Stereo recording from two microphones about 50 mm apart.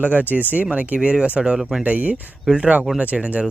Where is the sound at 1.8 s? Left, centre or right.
Right.